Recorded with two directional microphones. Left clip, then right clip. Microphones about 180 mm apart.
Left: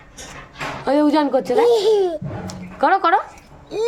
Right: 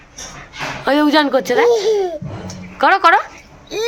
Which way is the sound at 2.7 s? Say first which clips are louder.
Right 4 dB; 10° left (ahead or behind).